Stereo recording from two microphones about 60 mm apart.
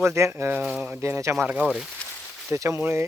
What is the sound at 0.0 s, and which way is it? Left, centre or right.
Speech, right.